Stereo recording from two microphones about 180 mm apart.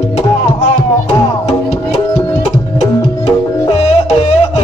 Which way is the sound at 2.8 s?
35° left (ahead or behind).